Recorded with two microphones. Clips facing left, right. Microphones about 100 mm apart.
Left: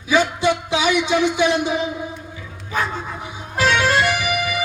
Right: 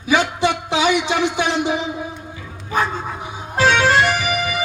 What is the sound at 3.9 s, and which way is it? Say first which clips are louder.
Music: right 2 dB; 45° right (ahead or behind).